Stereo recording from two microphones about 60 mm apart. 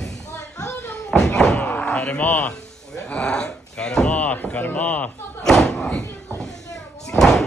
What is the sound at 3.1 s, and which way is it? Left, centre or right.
Speech, centre.